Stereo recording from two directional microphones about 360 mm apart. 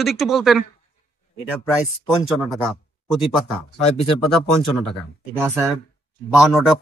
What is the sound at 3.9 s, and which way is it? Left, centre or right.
Speech, centre.